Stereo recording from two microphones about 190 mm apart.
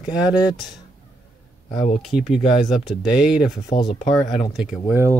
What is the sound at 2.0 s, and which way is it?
Speech, centre (ahead or behind).